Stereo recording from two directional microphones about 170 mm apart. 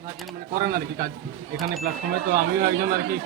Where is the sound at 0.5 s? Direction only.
55° right (ahead or behind).